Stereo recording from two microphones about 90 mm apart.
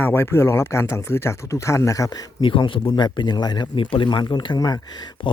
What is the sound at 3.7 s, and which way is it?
Speech, 70° left (ahead or behind).